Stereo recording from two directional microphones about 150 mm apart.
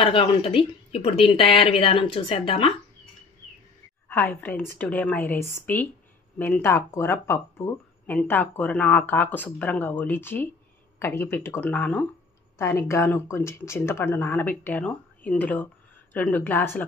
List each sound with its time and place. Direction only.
0.0 s speech: 35° left (ahead or behind)
4.1 s speech: 10° left (ahead or behind)